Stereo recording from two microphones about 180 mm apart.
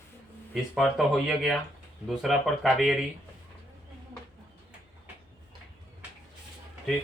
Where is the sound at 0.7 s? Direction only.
Centre (ahead or behind).